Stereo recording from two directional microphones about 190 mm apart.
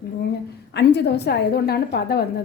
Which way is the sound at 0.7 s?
60° left (ahead or behind).